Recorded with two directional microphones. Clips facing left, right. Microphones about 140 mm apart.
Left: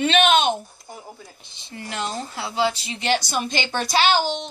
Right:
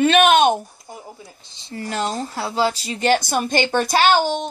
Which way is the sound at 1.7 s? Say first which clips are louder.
Right 5 dB; 40° right (ahead or behind).